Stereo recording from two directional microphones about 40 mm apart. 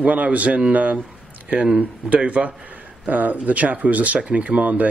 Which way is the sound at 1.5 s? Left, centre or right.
Right.